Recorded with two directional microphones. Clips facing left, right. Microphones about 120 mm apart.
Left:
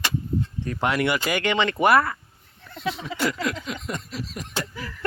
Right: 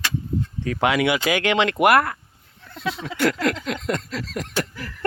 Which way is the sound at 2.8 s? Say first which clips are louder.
Right 3 dB; 75° right (ahead or behind).